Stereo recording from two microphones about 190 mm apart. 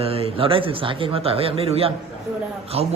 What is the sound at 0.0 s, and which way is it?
Speech, 30° right (ahead or behind).